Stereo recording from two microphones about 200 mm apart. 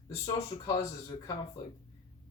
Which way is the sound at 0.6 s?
15° left (ahead or behind).